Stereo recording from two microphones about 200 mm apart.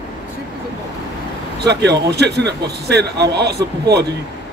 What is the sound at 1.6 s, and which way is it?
A man's voice, 55° right (ahead or behind).